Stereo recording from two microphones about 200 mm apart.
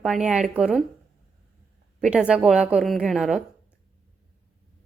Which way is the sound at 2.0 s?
5° right (ahead or behind).